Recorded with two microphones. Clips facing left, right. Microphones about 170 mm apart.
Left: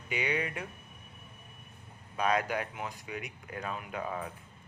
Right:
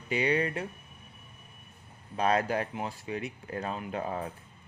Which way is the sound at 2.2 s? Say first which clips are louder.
Right 3 dB; 35° right (ahead or behind).